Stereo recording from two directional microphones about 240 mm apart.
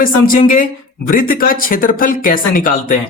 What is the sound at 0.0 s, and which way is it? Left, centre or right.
Speech, left.